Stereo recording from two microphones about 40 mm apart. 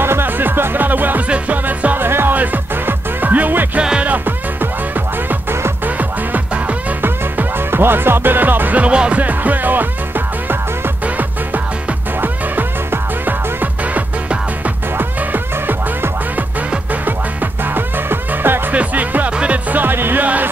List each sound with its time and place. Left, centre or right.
0.0 s music: right
2.0 s music: right
2.3 s music: right
7.0 s music: right
8.7 s speech: right
9.2 s music: right
12.2 s music: right
17.7 s music: right
18.7 s music: right
19.3 s music: right
19.7 s speech: right